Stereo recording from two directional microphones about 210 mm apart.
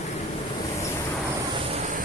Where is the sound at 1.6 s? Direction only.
30° right (ahead or behind).